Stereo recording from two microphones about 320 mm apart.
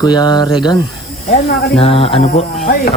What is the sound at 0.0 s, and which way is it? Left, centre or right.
Speech, centre.